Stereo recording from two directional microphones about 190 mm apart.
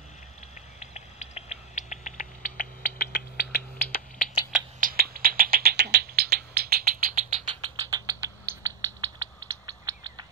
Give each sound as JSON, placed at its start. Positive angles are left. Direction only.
{"t": 0.7, "sound": "rodents", "side_deg": 35}
{"t": 4.7, "sound": "rodents", "side_deg": -50}